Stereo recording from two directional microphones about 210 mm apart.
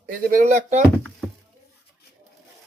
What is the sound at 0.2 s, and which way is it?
Speech, 40° right (ahead or behind).